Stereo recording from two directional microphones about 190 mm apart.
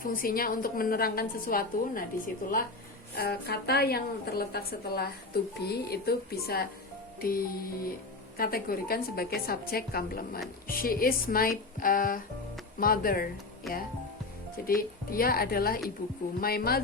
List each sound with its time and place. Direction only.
0.0 s a woman's voice: 50° left (ahead or behind)
13.7 s speech: centre (ahead or behind)
14.7 s a woman's voice: 50° left (ahead or behind)